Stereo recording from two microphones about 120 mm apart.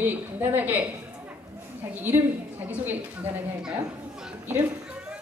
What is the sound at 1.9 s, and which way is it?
A woman's voice, 15° right (ahead or behind).